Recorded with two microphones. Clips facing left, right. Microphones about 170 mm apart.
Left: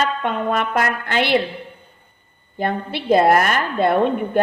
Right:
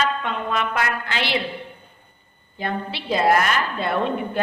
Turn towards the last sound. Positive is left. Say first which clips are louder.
# left 5 dB
turn(degrees=50)  # may be behind; listen again after turning